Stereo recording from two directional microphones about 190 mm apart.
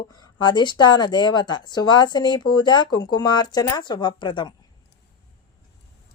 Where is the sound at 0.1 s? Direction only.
25° left (ahead or behind).